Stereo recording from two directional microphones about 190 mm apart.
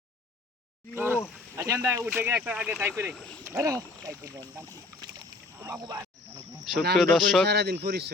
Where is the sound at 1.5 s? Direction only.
15° right (ahead or behind).